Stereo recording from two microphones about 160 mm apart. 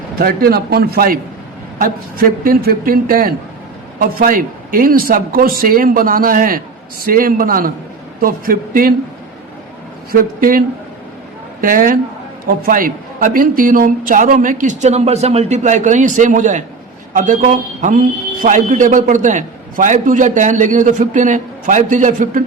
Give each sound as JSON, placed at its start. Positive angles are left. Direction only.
{"t": 0.2, "sound": "a man's voice", "side_deg": -70}
{"t": 10.1, "sound": "speech", "side_deg": -60}
{"t": 11.6, "sound": "a man's voice", "side_deg": -60}